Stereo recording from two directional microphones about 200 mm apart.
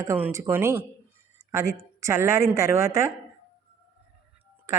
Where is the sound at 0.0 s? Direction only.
15° right (ahead or behind).